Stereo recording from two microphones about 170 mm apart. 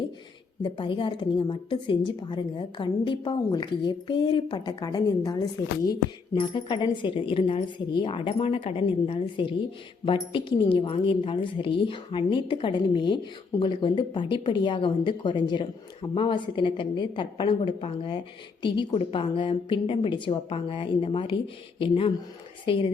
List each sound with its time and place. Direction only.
0.6 s a woman's voice: 30° left (ahead or behind)